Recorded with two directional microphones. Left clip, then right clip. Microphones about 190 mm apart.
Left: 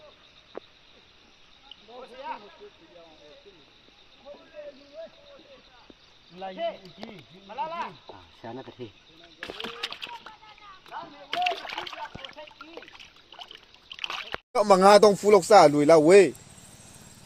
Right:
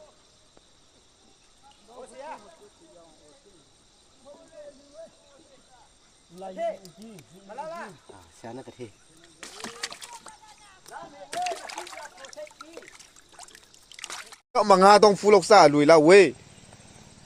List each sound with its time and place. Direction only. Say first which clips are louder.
2.1 s a sound: left 3 dB; 50° right (ahead or behind)
7.5 s speech: left 4 dB; 60° right (ahead or behind)
8.4 s speech: even; 15° right (ahead or behind)
9.4 s rowboat: left 3 dB; 20° right (ahead or behind)
11.3 s splash: left 3 dB; 15° right (ahead or behind)
14.5 s speech: right 1 dB; 10° right (ahead or behind)